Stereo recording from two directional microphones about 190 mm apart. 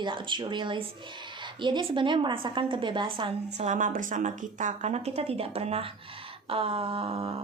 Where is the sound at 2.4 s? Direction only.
25° right (ahead or behind).